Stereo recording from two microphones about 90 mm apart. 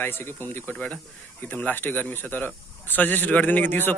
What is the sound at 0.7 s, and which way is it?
Speech, 10° left (ahead or behind).